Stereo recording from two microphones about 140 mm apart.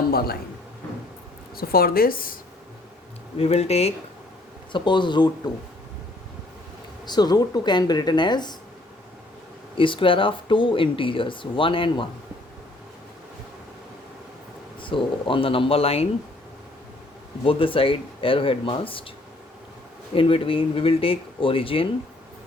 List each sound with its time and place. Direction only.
0.1 s a man's voice: 90° left
1.5 s a woman's voice: 90° left
3.3 s speech: 45° left (ahead or behind)
4.7 s speech: 35° left (ahead or behind)
7.0 s speech: 30° left (ahead or behind)
9.7 s speech: 35° left (ahead or behind)
14.8 s speech: 35° left (ahead or behind)
17.4 s speech: 40° left (ahead or behind)
20.1 s speech: 40° left (ahead or behind)